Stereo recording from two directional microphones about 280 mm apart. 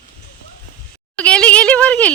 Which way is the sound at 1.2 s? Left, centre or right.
Centre.